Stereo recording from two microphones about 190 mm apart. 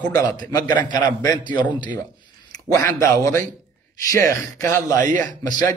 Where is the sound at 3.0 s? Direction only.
15° left (ahead or behind).